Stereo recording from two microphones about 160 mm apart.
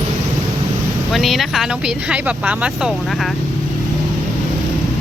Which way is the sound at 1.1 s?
Centre (ahead or behind).